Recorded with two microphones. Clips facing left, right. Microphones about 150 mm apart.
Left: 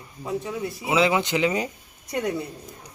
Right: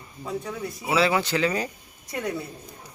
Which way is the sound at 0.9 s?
20° left (ahead or behind).